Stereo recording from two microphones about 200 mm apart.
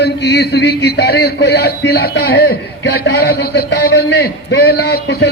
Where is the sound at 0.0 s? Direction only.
55° left (ahead or behind).